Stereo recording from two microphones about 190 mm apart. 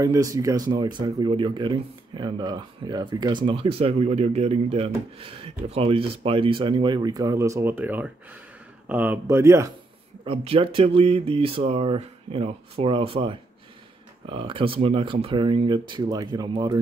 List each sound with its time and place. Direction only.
0.0 s speech: 20° right (ahead or behind)
10.2 s speech: 30° right (ahead or behind)